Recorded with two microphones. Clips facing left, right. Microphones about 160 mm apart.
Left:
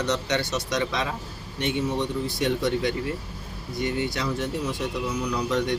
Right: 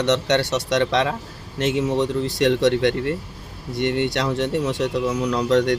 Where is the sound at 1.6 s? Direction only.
90° right.